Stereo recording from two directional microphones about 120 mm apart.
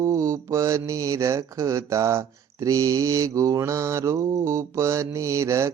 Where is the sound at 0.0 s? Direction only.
25° right (ahead or behind).